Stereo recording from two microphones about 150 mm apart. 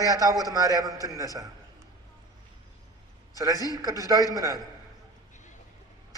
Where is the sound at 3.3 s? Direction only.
25° right (ahead or behind).